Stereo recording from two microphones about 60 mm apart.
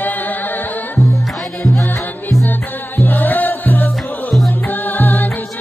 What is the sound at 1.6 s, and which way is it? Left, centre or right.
Music, centre.